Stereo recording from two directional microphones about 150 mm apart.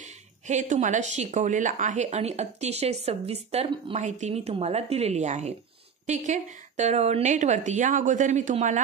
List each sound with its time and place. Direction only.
0.0 s speech: 55° right (ahead or behind)